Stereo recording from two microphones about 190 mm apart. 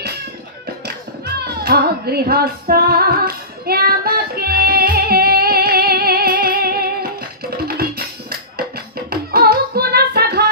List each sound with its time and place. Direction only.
0.8 s music: 55° right (ahead or behind)
9.1 s music: 55° right (ahead or behind)